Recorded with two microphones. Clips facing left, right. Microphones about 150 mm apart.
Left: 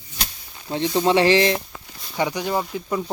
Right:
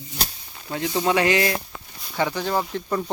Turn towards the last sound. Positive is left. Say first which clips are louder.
# even
turn(degrees=10)  # may be behind; listen again after turning